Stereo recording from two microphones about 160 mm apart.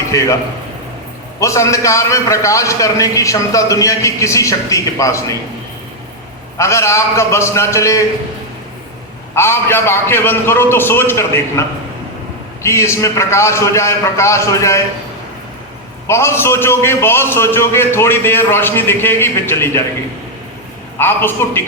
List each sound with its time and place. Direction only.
1.4 s a man's voice: 20° left (ahead or behind)
6.6 s a man's voice: 20° left (ahead or behind)
9.3 s a man's voice: 15° left (ahead or behind)
12.6 s a man's voice: 15° left (ahead or behind)
16.0 s a man's voice: 15° left (ahead or behind)
21.0 s a man's voice: 15° left (ahead or behind)